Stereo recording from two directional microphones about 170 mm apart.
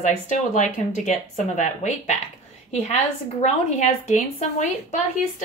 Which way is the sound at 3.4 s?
40° left (ahead or behind).